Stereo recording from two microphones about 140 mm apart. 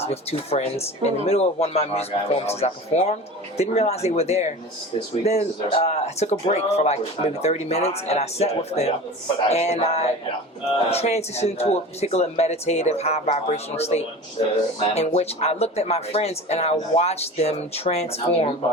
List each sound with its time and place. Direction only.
0.0 s speech: 45° left (ahead or behind)